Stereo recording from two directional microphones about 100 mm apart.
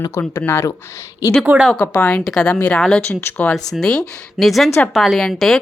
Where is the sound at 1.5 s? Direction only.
20° right (ahead or behind).